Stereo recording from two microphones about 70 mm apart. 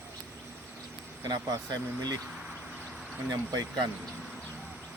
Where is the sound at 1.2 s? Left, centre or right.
Right.